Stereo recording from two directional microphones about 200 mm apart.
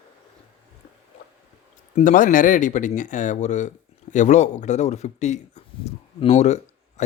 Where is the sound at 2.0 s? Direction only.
40° left (ahead or behind).